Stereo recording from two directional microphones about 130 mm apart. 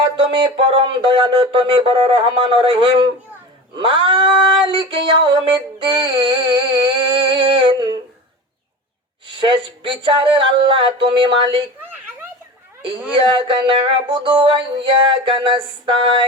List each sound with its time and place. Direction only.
0.2 s speech: 40° right (ahead or behind)
3.8 s music: 40° right (ahead or behind)
9.4 s music: 40° right (ahead or behind)
11.8 s a sound: 15° right (ahead or behind)
13.2 s music: 40° right (ahead or behind)